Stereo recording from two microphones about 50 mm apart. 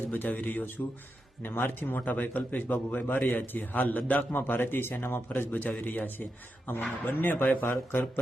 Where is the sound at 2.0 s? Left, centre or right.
Left.